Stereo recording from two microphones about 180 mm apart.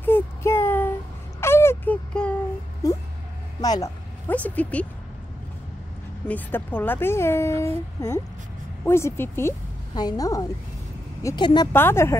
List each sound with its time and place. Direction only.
0.0 s child singing: 10° left (ahead or behind)
1.4 s a sound: 15° left (ahead or behind)
3.6 s a woman's voice: 20° left (ahead or behind)
4.3 s a woman's voice: 10° left (ahead or behind)
6.2 s a woman's voice: 10° left (ahead or behind)
11.7 s a woman's voice: 15° left (ahead or behind)